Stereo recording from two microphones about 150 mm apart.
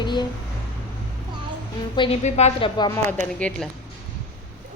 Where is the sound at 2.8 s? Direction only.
25° left (ahead or behind).